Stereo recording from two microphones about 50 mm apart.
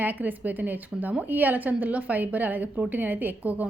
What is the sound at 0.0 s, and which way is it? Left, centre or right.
A woman's voice, right.